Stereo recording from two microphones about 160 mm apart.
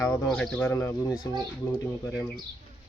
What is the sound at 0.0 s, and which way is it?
Speech, 5° left (ahead or behind).